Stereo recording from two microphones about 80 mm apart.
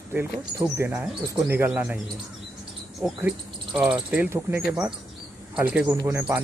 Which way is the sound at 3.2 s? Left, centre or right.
Centre.